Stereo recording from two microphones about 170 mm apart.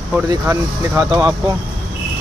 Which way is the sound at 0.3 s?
15° right (ahead or behind).